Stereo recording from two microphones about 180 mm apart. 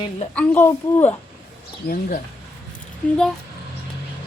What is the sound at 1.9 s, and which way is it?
Speech, 50° left (ahead or behind).